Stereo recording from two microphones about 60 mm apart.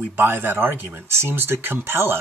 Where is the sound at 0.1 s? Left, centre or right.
Right.